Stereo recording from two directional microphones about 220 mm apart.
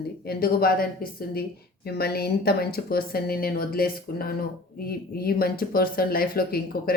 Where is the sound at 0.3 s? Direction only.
45° left (ahead or behind).